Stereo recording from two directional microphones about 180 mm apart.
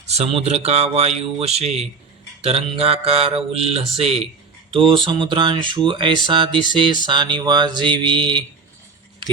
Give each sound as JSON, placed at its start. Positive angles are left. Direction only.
{"t": 0.1, "sound": "speech", "side_deg": -35}